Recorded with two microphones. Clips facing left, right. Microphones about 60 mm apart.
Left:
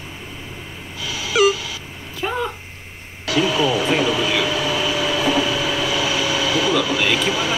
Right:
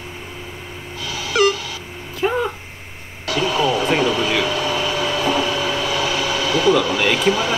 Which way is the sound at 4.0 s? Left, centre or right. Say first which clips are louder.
Right 1 dB; right.